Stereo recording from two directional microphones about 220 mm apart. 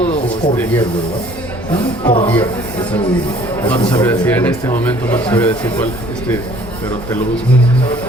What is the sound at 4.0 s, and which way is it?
A man's voice, 10° left (ahead or behind).